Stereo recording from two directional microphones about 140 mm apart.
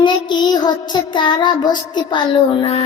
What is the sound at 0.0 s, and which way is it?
Child singing, 35° left (ahead or behind).